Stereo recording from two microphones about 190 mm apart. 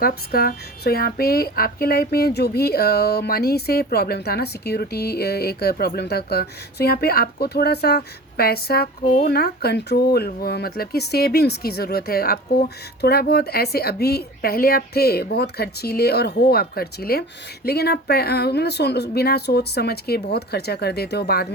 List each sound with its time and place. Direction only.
0.0 s speech: 50° left (ahead or behind)